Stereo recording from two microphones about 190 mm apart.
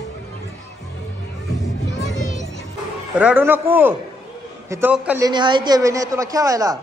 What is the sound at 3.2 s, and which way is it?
A man's voice, 10° right (ahead or behind).